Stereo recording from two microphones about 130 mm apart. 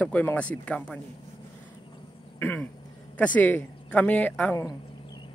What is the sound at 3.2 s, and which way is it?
Speech, 10° left (ahead or behind).